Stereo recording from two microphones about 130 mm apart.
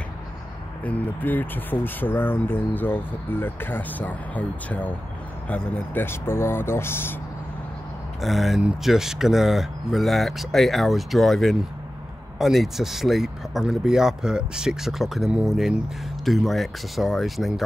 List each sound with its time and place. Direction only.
0.8 s speech: 10° left (ahead or behind)
8.2 s speech: centre (ahead or behind)